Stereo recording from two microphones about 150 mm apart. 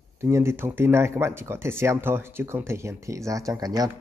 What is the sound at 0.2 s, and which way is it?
Speech, 15° right (ahead or behind).